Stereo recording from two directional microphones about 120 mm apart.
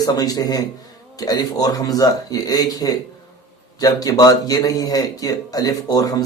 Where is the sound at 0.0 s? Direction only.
30° left (ahead or behind).